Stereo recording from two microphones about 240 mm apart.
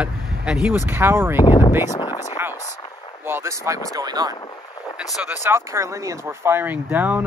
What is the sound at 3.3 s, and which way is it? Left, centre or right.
Speech, centre.